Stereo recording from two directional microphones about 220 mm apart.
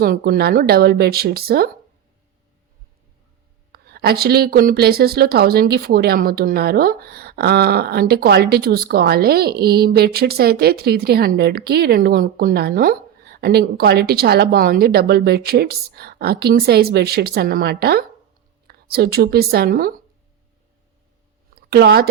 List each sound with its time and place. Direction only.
0.0 s speech: 40° right (ahead or behind)
3.7 s speech: 45° right (ahead or behind)
21.5 s a sound: 45° right (ahead or behind)